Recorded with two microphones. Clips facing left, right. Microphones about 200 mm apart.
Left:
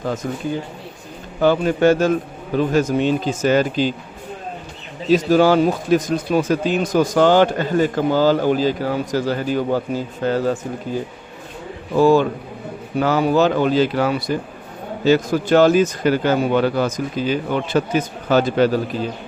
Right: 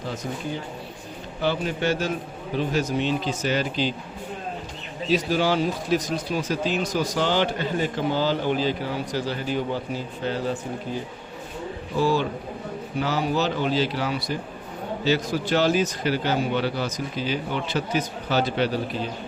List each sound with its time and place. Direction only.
0.0 s speech: 50° left (ahead or behind)
1.4 s speech: 50° left (ahead or behind)
5.1 s speech: 45° left (ahead or behind)
11.9 s speech: 50° left (ahead or behind)